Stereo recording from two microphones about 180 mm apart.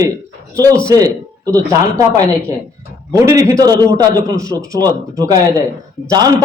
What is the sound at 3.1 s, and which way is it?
Speech, 15° right (ahead or behind).